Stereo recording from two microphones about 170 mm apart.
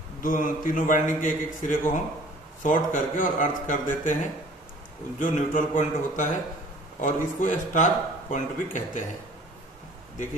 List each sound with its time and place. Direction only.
0.2 s a man's voice: 55° left (ahead or behind)